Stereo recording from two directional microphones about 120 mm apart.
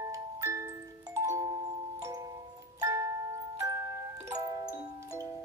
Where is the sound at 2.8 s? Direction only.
25° right (ahead or behind).